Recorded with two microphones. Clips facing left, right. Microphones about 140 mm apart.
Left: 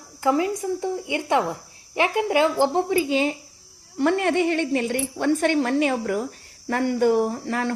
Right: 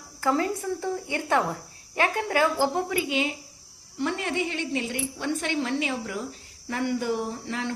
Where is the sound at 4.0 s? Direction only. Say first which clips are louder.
Left 8 dB; 55° left (ahead or behind).